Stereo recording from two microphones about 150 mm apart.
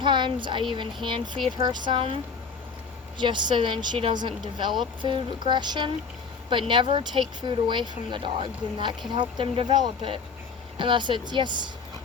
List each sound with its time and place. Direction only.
0.0 s a sound: 30° right (ahead or behind)
1.0 s speech: 30° right (ahead or behind)
3.2 s speech: 30° right (ahead or behind)